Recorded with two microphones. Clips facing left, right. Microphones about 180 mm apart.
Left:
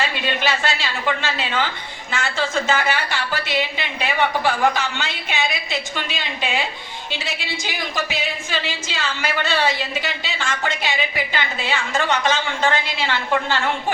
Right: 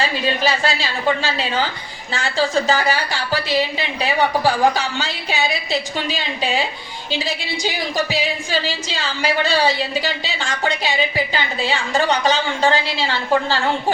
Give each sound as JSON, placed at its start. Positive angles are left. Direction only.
{"t": 0.0, "sound": "a woman's voice", "side_deg": -35}
{"t": 10.8, "sound": "a woman's voice", "side_deg": -30}